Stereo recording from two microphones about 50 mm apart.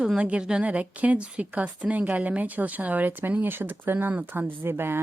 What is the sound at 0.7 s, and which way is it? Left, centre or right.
A woman's voice, right.